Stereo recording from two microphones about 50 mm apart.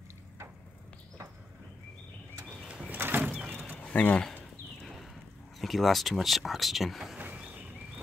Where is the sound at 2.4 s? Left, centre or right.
Centre.